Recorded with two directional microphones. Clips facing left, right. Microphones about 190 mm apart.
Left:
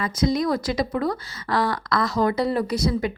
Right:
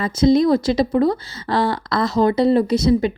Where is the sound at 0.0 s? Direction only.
25° right (ahead or behind).